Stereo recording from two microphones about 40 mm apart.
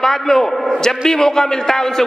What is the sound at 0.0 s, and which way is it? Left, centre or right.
A man's voice, centre.